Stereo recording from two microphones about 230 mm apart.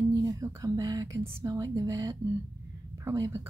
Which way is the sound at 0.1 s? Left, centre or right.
Centre.